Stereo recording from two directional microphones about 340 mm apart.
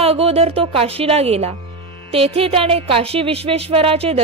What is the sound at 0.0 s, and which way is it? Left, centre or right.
A woman's voice, centre.